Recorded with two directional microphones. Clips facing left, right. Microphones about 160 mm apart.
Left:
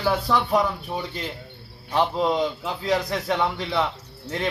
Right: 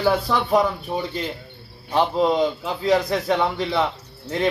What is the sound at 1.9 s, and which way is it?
Speech, 15° right (ahead or behind).